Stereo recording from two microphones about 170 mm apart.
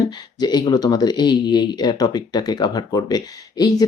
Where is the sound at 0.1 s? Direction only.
25° left (ahead or behind).